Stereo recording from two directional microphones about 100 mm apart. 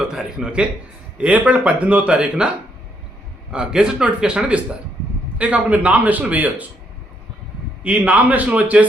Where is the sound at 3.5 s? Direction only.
5° right (ahead or behind).